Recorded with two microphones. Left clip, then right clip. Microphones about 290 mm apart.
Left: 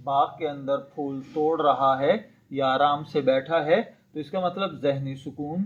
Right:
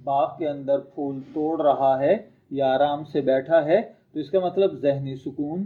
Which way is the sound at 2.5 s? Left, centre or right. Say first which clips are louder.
Right 1 dB; centre.